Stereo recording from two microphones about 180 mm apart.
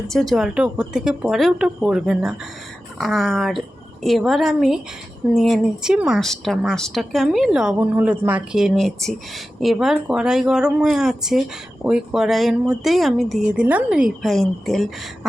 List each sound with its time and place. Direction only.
0.1 s speech: centre (ahead or behind)